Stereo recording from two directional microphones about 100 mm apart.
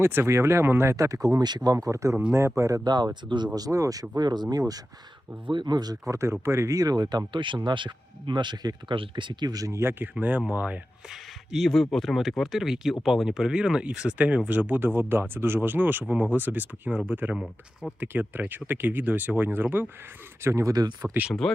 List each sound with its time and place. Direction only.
0.0 s speech: 25° right (ahead or behind)
4.2 s speech: 45° right (ahead or behind)
5.5 s speech: 50° right (ahead or behind); by 10.8 s 15° right (ahead or behind)
11.1 s speech: centre (ahead or behind); by 21.1 s 40° right (ahead or behind)
21.1 s speech: 15° right (ahead or behind)